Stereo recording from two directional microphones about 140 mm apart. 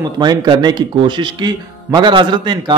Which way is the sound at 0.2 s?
30° right (ahead or behind).